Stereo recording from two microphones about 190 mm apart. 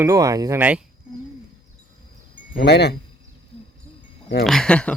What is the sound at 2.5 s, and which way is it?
Speech, 60° left (ahead or behind).